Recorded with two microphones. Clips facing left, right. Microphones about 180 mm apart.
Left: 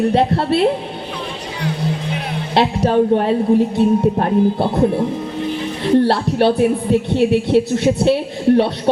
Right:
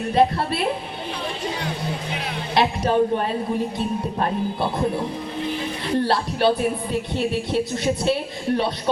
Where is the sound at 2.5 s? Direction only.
65° left (ahead or behind).